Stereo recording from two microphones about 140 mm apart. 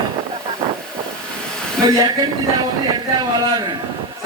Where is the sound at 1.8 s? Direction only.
30° right (ahead or behind).